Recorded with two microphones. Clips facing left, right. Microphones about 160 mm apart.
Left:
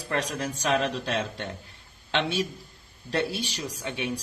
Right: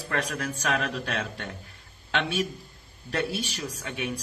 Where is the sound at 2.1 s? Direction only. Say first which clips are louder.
Left 1 dB; 35° left (ahead or behind).